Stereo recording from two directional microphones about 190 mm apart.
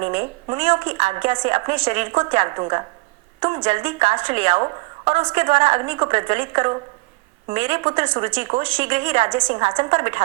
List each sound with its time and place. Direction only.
0.0 s a woman's voice: 30° right (ahead or behind)